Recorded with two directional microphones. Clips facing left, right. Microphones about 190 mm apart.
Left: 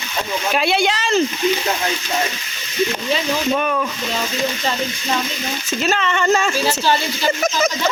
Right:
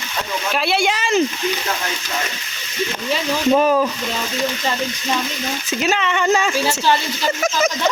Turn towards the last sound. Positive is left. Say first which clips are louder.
# even
turn(degrees=-10)  # may be behind; listen again after turning